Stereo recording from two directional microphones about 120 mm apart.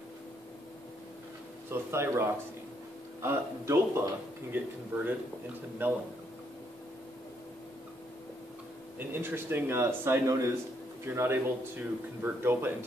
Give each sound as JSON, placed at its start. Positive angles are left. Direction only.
{"t": 1.7, "sound": "speech", "side_deg": -20}
{"t": 5.8, "sound": "a man's voice", "side_deg": -15}
{"t": 8.9, "sound": "a man's voice", "side_deg": -20}